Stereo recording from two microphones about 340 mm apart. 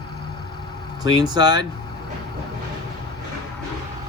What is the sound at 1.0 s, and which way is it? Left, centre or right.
Speech, centre.